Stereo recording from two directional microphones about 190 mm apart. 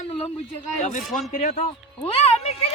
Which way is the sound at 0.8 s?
40° left (ahead or behind).